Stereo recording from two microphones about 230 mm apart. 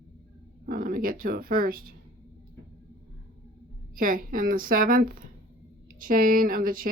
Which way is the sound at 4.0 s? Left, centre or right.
Right.